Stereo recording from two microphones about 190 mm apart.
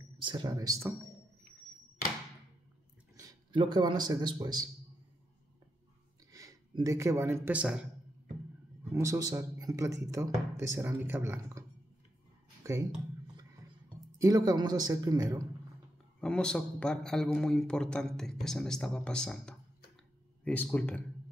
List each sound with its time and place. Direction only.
0.2 s a man's voice: 25° right (ahead or behind)
3.2 s a man's voice: 20° right (ahead or behind)
6.3 s a man's voice: 20° right (ahead or behind)
8.9 s a man's voice: 15° right (ahead or behind)
12.6 s speech: 15° right (ahead or behind)
14.1 s a man's voice: 20° right (ahead or behind)
16.2 s a man's voice: 5° left (ahead or behind)